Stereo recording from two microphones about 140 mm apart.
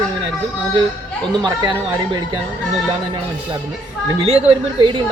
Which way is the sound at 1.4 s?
35° right (ahead or behind).